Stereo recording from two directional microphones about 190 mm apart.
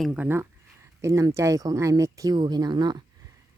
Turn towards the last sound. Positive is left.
turn(degrees=-20)  # may be behind; listen again after turning